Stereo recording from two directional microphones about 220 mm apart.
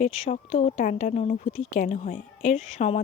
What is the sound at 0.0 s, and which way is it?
A woman's voice, 35° left (ahead or behind).